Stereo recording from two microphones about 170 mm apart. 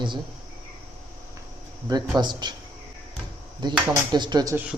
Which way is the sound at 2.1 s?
25° right (ahead or behind).